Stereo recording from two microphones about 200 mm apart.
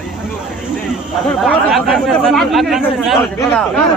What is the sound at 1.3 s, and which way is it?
Speech, centre (ahead or behind).